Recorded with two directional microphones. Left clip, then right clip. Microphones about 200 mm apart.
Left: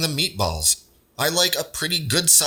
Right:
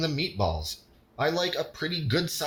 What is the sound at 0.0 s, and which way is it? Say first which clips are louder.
A man's voice: left 5 dB; 35° left (ahead or behind).